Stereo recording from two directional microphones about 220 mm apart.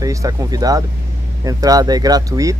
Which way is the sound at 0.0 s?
15° right (ahead or behind).